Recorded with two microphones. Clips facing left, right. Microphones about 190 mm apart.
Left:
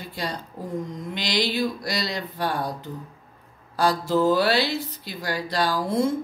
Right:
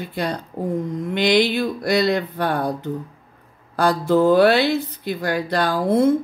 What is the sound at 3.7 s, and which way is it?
Speech, 55° right (ahead or behind).